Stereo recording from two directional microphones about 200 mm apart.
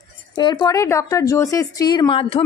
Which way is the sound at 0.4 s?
20° left (ahead or behind).